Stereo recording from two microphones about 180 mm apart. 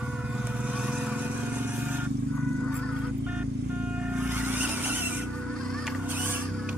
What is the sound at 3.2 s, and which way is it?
Vehicle, 5° right (ahead or behind).